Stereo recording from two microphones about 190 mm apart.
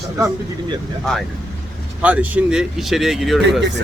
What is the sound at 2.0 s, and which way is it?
Speech, 10° right (ahead or behind).